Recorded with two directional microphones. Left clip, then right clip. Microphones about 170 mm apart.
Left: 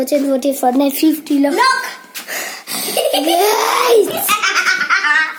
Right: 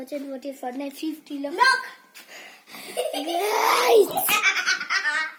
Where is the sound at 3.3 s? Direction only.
Centre (ahead or behind).